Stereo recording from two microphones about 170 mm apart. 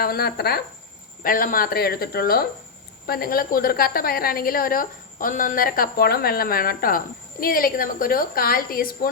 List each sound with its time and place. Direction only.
0.0 s a woman's voice: 65° left (ahead or behind)
1.2 s a woman's voice: 55° left (ahead or behind)